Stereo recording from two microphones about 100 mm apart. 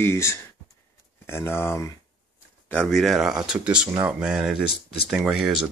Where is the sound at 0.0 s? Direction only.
25° left (ahead or behind).